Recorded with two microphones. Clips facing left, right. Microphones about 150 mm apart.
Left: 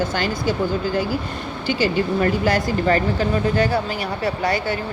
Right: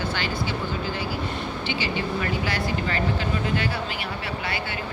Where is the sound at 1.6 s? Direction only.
45° left (ahead or behind).